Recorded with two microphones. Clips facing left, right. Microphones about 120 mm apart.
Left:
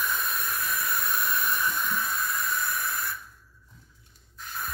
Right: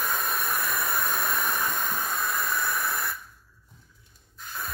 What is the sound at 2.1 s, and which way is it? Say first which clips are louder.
Hiss: right 1 dB; 60° right (ahead or behind).